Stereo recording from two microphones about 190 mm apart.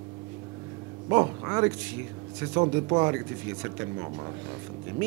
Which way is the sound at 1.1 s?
15° right (ahead or behind).